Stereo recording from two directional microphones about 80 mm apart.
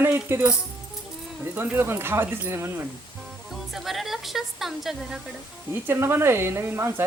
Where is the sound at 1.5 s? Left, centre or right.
Right.